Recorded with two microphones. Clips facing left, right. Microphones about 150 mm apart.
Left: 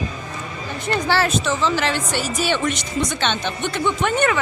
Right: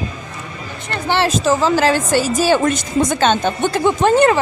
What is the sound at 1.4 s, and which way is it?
Speech, 40° right (ahead or behind).